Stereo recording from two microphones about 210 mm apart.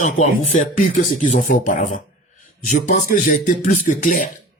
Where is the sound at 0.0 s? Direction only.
35° left (ahead or behind).